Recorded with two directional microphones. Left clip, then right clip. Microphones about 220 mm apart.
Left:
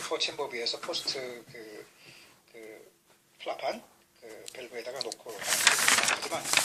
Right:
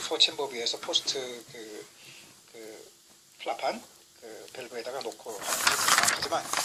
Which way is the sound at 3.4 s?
35° right (ahead or behind).